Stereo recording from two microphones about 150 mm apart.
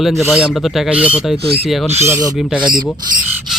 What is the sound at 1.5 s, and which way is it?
Filing, 40° right (ahead or behind).